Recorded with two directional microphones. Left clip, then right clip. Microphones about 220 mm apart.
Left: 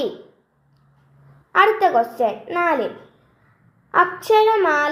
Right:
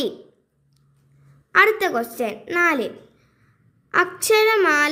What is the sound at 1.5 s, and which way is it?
A child's voice, 50° right (ahead or behind).